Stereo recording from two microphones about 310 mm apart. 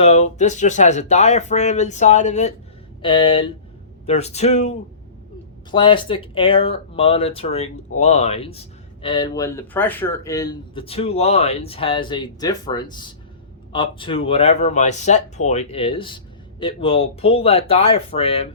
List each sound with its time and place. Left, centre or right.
0.0 s speech: left